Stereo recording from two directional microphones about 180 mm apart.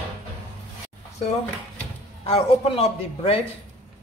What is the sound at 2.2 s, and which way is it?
A man's voice, 35° left (ahead or behind).